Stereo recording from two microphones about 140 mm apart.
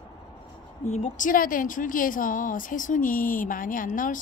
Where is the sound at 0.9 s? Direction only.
55° left (ahead or behind).